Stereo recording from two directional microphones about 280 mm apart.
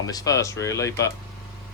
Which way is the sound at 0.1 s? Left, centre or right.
Centre.